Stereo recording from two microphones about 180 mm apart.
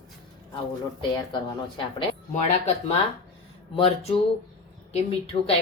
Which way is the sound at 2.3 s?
35° left (ahead or behind).